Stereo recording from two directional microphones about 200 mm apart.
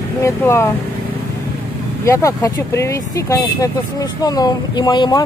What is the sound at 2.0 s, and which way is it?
Speech, 15° left (ahead or behind).